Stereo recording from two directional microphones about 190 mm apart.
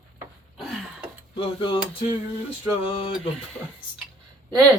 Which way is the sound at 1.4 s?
25° left (ahead or behind).